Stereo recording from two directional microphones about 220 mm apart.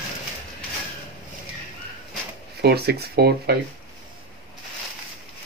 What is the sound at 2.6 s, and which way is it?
Speech, 45° right (ahead or behind).